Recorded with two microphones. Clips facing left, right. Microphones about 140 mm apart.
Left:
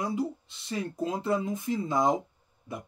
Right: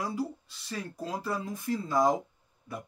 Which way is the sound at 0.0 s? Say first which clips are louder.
Left 3 dB; 20° left (ahead or behind).